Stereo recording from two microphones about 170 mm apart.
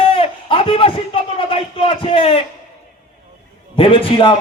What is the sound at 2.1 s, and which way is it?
Speech, 35° left (ahead or behind).